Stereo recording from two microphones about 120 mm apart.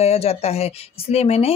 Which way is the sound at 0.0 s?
60° left (ahead or behind).